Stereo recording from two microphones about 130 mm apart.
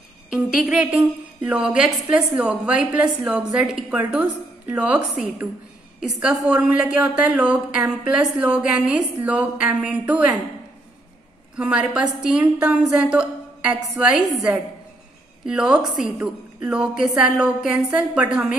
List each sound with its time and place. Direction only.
0.3 s a woman's voice: 5° right (ahead or behind)
11.5 s a woman's voice: 5° right (ahead or behind)